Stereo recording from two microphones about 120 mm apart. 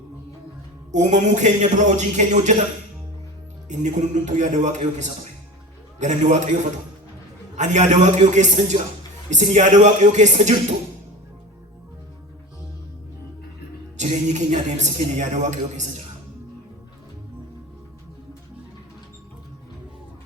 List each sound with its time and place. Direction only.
0.9 s a man's voice: 90° right
3.7 s a man's voice: 90° right
13.9 s speech: 85° right